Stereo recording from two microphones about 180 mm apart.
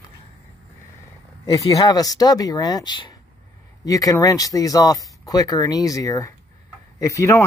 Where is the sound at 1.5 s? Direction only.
20° left (ahead or behind).